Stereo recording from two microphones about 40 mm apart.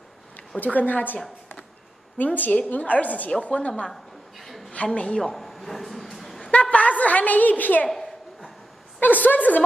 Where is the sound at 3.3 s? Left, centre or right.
Left.